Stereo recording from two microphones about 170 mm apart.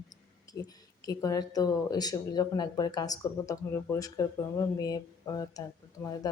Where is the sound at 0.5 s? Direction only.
20° left (ahead or behind).